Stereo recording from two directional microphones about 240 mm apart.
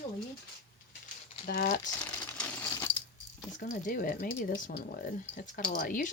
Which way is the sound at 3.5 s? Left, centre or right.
Left.